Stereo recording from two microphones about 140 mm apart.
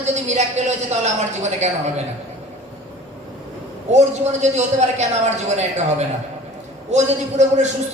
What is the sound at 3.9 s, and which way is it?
Speech, 55° right (ahead or behind).